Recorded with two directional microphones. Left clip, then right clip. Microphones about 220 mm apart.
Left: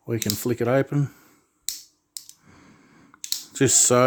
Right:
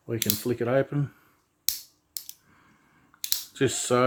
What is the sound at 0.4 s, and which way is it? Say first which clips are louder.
Speech: left 3 dB; 45° left (ahead or behind).